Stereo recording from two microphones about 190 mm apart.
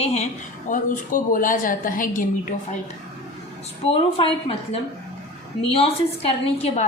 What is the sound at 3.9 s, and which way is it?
A woman's voice, 30° left (ahead or behind).